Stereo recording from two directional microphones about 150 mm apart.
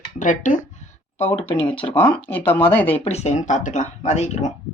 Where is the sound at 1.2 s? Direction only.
40° left (ahead or behind).